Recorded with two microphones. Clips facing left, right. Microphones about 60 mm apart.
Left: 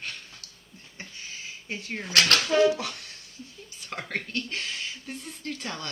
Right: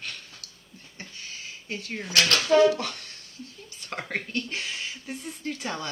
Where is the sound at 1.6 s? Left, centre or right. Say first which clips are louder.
Even; left.